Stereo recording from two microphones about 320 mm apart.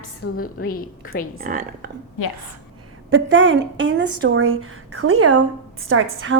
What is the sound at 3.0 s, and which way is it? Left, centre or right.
A woman's voice, right.